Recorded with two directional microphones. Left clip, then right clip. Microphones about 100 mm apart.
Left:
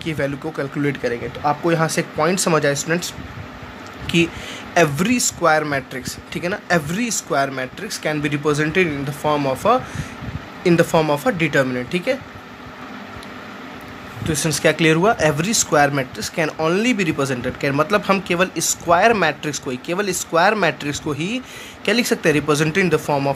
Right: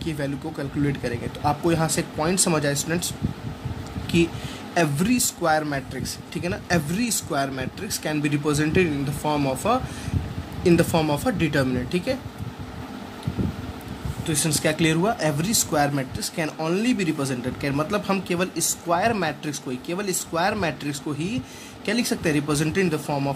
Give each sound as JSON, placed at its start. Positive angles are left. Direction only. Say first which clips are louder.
{"t": 0.0, "sound": "speech", "louder": "left 6 dB", "side_deg": 40}
{"t": 1.4, "sound": "speech", "louder": "left 4 dB", "side_deg": 20}
{"t": 4.1, "sound": "speech", "louder": "left 4 dB", "side_deg": 45}
{"t": 14.2, "sound": "speech", "louder": "left 6 dB", "side_deg": 45}